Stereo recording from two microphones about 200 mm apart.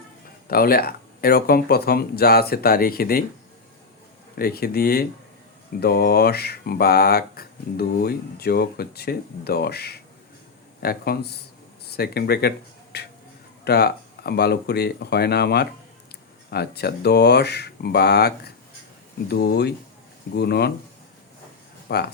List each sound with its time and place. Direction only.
0.4 s speech: 50° left (ahead or behind)
4.4 s speech: 50° left (ahead or behind)
21.9 s speech: 55° left (ahead or behind)